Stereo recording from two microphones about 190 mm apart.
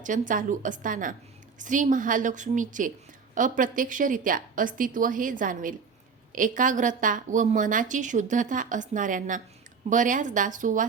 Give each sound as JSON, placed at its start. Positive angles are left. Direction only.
{"t": 0.0, "sound": "a woman's voice", "side_deg": -45}